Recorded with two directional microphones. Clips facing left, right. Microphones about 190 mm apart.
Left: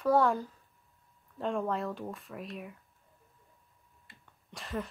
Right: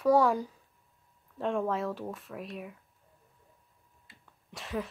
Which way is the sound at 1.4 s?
Centre (ahead or behind).